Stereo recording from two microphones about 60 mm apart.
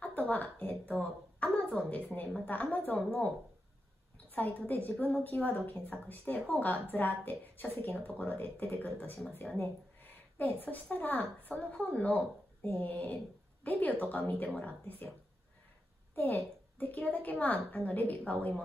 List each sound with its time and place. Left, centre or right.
0.0 s a woman's voice: left
16.2 s a woman's voice: left